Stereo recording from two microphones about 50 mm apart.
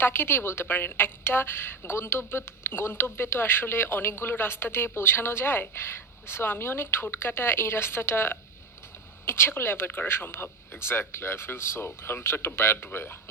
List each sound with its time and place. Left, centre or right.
0.0 s a woman's voice: left